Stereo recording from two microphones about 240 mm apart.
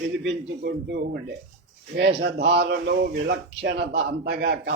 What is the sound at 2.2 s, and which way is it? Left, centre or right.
A man's voice, right.